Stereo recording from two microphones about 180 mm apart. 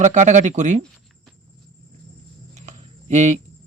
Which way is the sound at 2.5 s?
40° right (ahead or behind).